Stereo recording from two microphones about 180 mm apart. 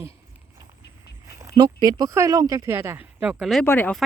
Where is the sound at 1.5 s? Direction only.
20° right (ahead or behind).